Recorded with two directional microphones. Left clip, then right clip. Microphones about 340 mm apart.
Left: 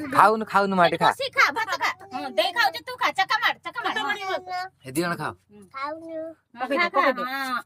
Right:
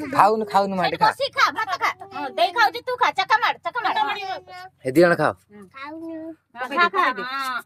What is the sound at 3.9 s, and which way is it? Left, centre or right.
Speech, left.